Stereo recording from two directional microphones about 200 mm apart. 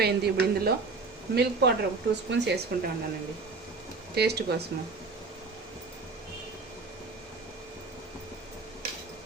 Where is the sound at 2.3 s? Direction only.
60° right (ahead or behind).